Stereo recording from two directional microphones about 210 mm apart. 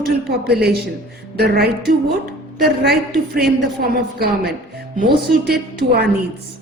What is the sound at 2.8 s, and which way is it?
A woman's voice, 50° right (ahead or behind).